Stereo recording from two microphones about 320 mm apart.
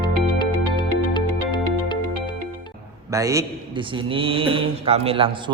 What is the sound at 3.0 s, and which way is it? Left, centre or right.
A man's voice, centre.